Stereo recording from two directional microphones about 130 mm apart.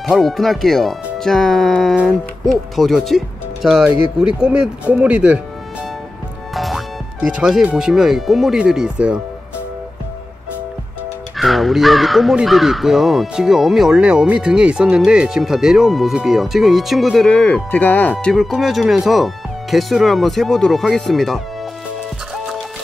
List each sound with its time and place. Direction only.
0.0 s speech: centre (ahead or behind)
6.5 s speech: centre (ahead or behind)
11.3 s speech: centre (ahead or behind)
17.3 s speech: 10° left (ahead or behind)
18.2 s speech: centre (ahead or behind)